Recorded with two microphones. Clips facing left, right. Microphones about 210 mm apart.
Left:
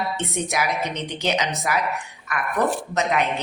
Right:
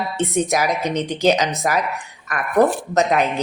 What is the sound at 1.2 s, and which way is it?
A woman's voice, 40° right (ahead or behind).